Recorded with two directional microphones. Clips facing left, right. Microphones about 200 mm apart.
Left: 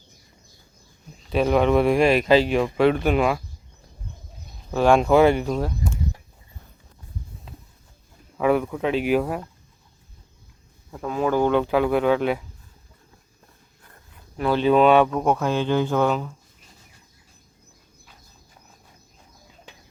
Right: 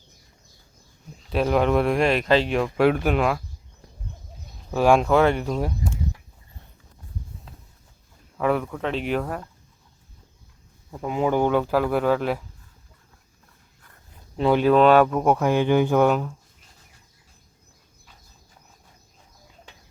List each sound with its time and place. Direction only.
1.3 s speech: centre (ahead or behind)
4.7 s speech: 5° right (ahead or behind)
5.0 s speech: 5° left (ahead or behind)
5.5 s speech: 10° right (ahead or behind)
8.4 s speech: 5° left (ahead or behind)
10.9 s speech: 15° right (ahead or behind)
14.3 s speech: 20° right (ahead or behind)
14.6 s speech: centre (ahead or behind)